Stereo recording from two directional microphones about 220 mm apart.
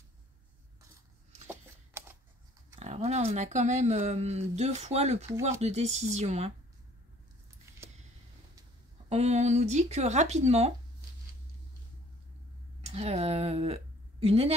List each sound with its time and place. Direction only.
1.5 s a sound: 10° right (ahead or behind)
2.8 s speech: 30° right (ahead or behind)
9.1 s speech: 30° right (ahead or behind)
12.8 s speech: 30° right (ahead or behind)